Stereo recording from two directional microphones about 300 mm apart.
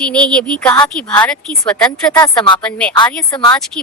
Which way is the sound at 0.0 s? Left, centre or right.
Centre.